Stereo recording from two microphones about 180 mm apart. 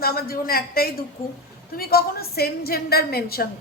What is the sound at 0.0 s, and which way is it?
A woman's voice, 55° left (ahead or behind).